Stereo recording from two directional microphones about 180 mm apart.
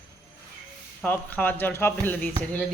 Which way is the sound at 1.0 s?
10° left (ahead or behind).